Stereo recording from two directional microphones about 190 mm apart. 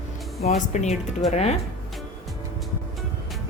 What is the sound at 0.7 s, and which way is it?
Speech, 40° left (ahead or behind).